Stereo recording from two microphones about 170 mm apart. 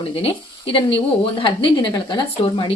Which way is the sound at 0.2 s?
30° left (ahead or behind).